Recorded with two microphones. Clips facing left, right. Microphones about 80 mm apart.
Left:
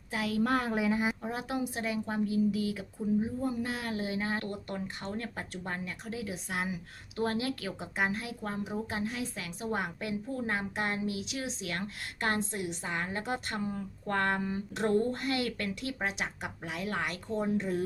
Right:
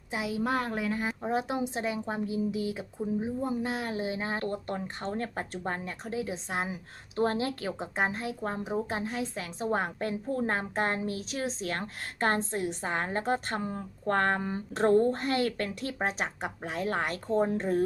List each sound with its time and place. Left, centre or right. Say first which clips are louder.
0.1 s a woman's voice: left 1 dB; centre
0.4 s speech: left 1 dB; centre
1.2 s a woman's voice: right 4 dB; right